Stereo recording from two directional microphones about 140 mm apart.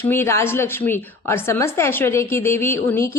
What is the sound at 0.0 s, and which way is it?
Speech, 15° left (ahead or behind).